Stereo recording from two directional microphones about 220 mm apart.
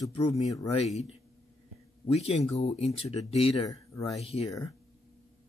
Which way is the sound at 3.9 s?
15° left (ahead or behind).